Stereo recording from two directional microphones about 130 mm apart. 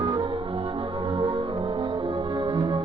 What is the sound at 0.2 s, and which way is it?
Music, 40° right (ahead or behind).